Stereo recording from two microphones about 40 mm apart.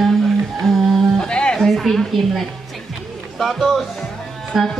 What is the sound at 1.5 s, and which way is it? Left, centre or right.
A woman's voice, centre.